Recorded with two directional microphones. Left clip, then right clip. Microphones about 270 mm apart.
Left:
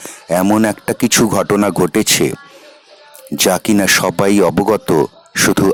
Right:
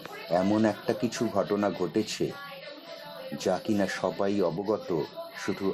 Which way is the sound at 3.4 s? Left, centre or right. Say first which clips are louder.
Left 14 dB; left.